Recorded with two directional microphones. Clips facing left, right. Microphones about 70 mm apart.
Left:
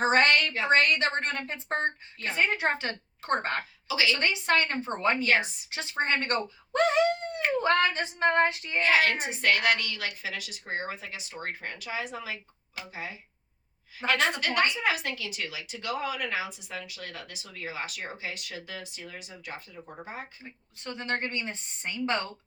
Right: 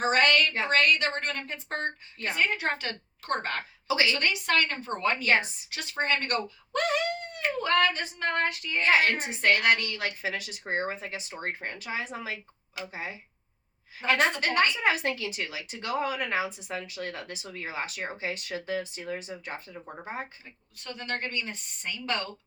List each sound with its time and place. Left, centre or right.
0.0 s a sound: left
0.7 s a woman's voice: left
3.8 s a woman's voice: right
4.1 s a woman's voice: left
8.8 s speech: right
14.2 s speech: right
20.4 s a woman's voice: left